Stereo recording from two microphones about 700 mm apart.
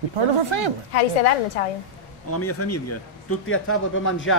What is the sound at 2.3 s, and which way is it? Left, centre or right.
Speech, centre.